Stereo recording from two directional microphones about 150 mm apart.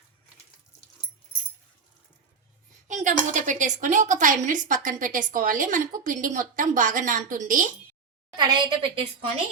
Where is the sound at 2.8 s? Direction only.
55° right (ahead or behind).